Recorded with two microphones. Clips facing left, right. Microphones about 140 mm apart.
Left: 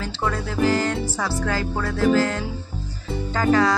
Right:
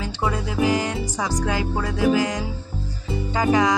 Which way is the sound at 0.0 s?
10° right (ahead or behind).